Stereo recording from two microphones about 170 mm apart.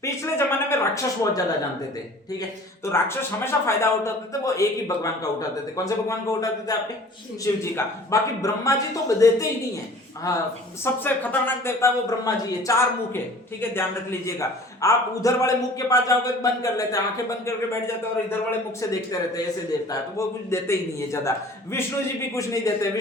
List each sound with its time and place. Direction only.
0.0 s a man's voice: 15° left (ahead or behind)
2.8 s a man's voice: 15° left (ahead or behind)
18.3 s a man's voice: 15° left (ahead or behind)